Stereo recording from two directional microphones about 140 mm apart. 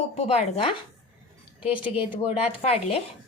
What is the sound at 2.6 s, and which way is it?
Speech, 45° left (ahead or behind).